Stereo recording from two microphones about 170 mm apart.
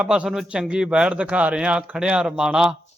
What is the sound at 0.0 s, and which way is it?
A man's voice, 5° right (ahead or behind).